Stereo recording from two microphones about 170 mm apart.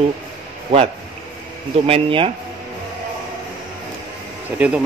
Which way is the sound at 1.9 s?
35° right (ahead or behind).